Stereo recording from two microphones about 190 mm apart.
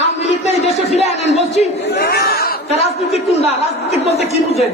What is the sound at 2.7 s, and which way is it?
Speech, 35° left (ahead or behind).